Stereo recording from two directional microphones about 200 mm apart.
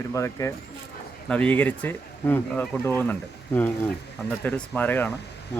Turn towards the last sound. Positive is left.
turn(degrees=10)  # may be behind; listen again after turning